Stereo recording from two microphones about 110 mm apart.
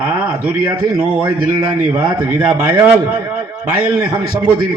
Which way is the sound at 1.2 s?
45° right (ahead or behind).